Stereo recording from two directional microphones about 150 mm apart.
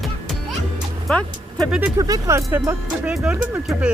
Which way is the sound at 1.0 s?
5° left (ahead or behind).